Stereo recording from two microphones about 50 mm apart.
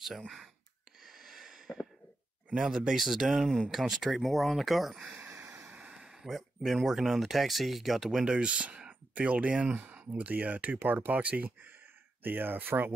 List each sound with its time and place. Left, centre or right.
1.0 s a sound: centre
2.5 s speech: centre
3.4 s speech: centre
3.7 s speech: centre
5.2 s vehicle: right
5.7 s a sound: right
5.9 s speech: centre; by 12.9 s right